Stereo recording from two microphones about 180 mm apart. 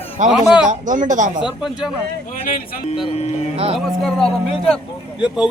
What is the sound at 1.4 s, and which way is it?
Speech, 5° right (ahead or behind).